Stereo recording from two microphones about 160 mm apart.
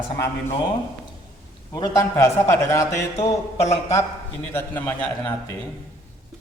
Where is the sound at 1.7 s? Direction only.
25° left (ahead or behind).